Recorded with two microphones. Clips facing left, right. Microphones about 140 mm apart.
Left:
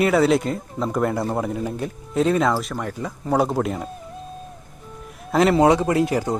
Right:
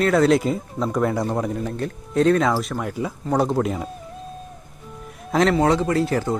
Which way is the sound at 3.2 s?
5° left (ahead or behind).